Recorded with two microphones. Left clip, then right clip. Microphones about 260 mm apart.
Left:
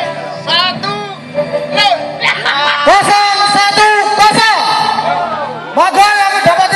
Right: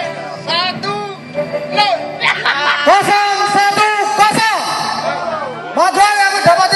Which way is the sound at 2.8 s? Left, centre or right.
Left.